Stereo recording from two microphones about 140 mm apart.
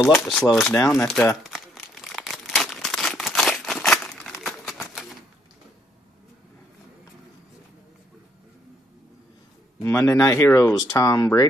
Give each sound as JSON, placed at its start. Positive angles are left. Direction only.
{"t": 0.0, "sound": "speech", "side_deg": 0}
{"t": 0.7, "sound": "speech", "side_deg": 20}
{"t": 1.3, "sound": "crumpling", "side_deg": 0}
{"t": 9.8, "sound": "speech", "side_deg": 20}